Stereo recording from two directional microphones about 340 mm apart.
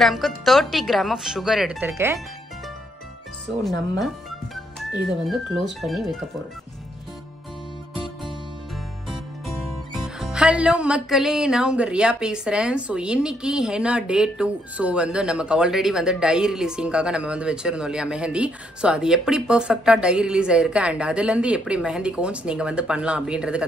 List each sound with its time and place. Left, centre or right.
0.0 s speech: centre
4.7 s speech: centre
9.1 s speech: centre